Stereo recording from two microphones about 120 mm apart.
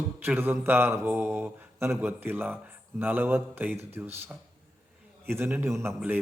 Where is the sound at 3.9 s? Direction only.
20° right (ahead or behind).